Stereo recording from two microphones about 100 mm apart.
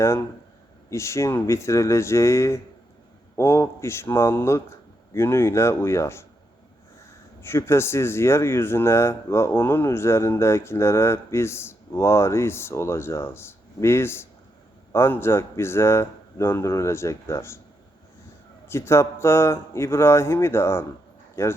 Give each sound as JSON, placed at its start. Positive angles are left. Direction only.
{"t": 0.0, "sound": "speech", "side_deg": 25}
{"t": 7.4, "sound": "speech", "side_deg": 25}
{"t": 18.7, "sound": "speech", "side_deg": 25}